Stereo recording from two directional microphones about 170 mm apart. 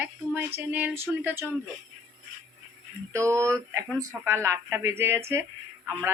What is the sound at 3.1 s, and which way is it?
Speech, 15° right (ahead or behind).